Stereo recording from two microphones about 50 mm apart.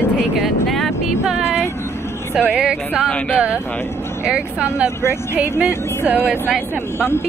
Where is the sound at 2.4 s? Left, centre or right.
Right.